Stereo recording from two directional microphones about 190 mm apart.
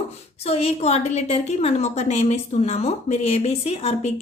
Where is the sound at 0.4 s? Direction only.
30° left (ahead or behind).